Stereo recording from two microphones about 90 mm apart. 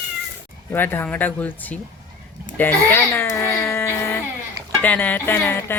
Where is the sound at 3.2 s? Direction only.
25° left (ahead or behind).